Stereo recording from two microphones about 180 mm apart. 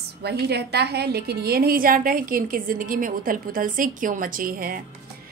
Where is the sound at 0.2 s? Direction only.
65° right (ahead or behind).